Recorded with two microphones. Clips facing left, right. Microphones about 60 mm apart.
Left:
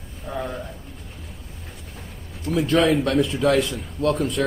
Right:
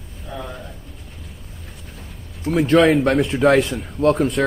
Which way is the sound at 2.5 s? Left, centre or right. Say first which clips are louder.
Right 4 dB; right.